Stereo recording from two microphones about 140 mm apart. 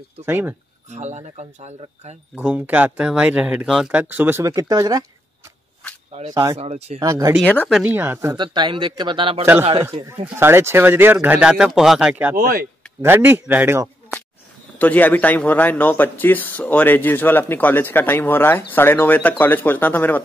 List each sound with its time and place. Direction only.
0.2 s speech: 15° right (ahead or behind)
0.8 s speech: 55° right (ahead or behind)
2.3 s speech: 10° right (ahead or behind)
4.0 s speech: 15° right (ahead or behind)
6.3 s speech: 25° right (ahead or behind)
6.6 s speech: 50° right (ahead or behind)
7.0 s speech: 25° right (ahead or behind)
7.4 s speech: 10° left (ahead or behind)
7.8 s speech: 15° right (ahead or behind)
8.4 s speech: 35° right (ahead or behind)
10.2 s speech: 15° right (ahead or behind)
12.4 s speech: 85° right
13.0 s speech: 15° right (ahead or behind)
14.8 s speech: 10° left (ahead or behind)